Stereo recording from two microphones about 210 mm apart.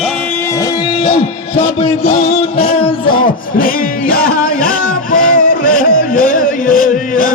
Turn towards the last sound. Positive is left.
turn(degrees=40)  # may be behind; listen again after turning